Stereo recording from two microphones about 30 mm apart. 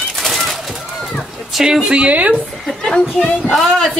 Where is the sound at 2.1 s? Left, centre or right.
Right.